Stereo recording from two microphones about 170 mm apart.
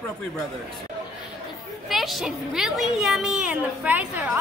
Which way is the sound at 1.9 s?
Centre (ahead or behind).